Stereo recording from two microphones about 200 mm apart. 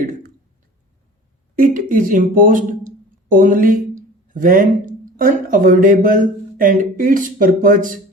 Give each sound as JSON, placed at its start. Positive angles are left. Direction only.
{"t": 1.5, "sound": "speech", "side_deg": -40}